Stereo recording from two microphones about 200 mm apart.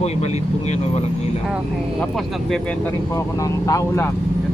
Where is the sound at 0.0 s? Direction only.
35° left (ahead or behind).